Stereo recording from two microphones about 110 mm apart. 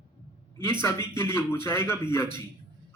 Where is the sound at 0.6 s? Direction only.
25° left (ahead or behind).